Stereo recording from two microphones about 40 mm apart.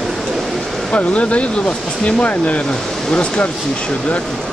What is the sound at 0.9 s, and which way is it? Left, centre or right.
Speech, left.